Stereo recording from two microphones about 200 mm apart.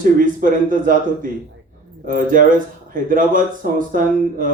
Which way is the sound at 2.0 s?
40° right (ahead or behind).